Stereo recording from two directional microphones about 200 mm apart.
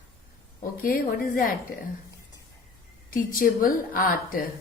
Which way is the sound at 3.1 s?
45° left (ahead or behind).